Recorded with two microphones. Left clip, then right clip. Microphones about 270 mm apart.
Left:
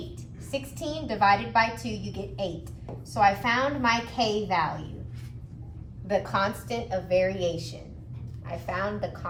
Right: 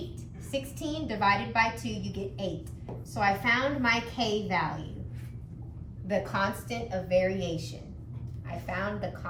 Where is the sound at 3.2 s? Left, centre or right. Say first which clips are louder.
Left 4 dB; centre.